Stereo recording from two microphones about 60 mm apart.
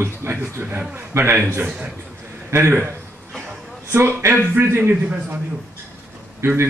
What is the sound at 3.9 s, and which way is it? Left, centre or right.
Speech, right.